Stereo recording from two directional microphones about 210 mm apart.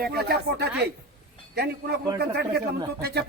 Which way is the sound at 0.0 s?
50° right (ahead or behind).